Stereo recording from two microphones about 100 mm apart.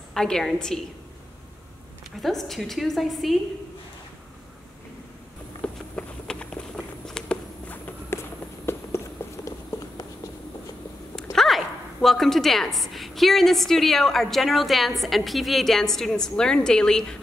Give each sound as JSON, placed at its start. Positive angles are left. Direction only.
{"t": 0.1, "sound": "a woman's voice", "side_deg": 5}
{"t": 2.2, "sound": "a woman's voice", "side_deg": 0}
{"t": 5.6, "sound": "a sound", "side_deg": 10}
{"t": 11.3, "sound": "a woman's voice", "side_deg": 0}